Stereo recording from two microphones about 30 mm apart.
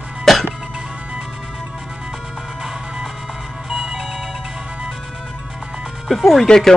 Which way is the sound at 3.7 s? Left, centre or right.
Centre.